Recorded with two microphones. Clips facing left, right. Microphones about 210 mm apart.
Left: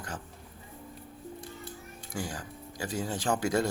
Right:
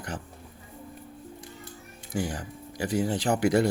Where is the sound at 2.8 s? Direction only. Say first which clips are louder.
Right 7 dB; 15° right (ahead or behind).